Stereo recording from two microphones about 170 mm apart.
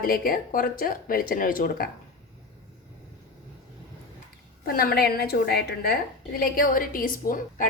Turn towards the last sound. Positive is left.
turn(degrees=55)  # may be behind; listen again after turning